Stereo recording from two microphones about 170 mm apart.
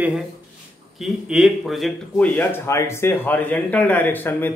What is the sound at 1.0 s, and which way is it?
Speech, centre (ahead or behind).